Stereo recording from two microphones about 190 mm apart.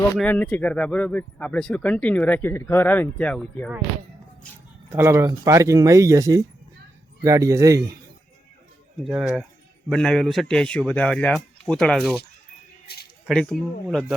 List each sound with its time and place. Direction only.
0.2 s speech: 10° left (ahead or behind)
4.9 s speech: 15° right (ahead or behind)
9.0 s a man's voice: centre (ahead or behind)
13.2 s a man's voice: centre (ahead or behind)